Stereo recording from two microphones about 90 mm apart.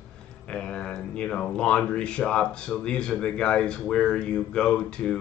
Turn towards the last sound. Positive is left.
turn(degrees=10)  # may be behind; listen again after turning